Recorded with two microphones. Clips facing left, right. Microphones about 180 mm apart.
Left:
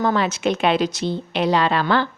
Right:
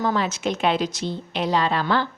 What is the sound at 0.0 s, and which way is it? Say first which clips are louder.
A woman's voice: left 3 dB; 65° left (ahead or behind).